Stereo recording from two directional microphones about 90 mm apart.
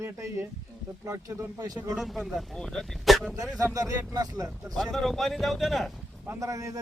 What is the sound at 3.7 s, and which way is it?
Speech, 45° right (ahead or behind).